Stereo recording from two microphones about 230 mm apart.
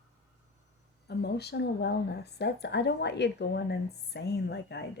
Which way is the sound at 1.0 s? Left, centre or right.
Left.